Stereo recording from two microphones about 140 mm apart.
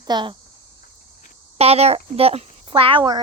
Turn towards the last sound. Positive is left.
turn(degrees=-35)  # may be behind; listen again after turning